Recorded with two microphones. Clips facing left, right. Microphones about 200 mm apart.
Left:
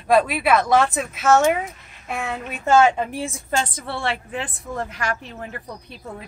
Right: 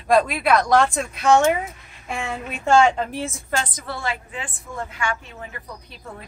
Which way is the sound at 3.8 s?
30° left (ahead or behind).